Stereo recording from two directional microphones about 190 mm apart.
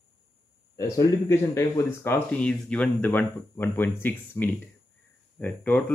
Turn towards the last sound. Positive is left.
turn(degrees=5)  # may be behind; listen again after turning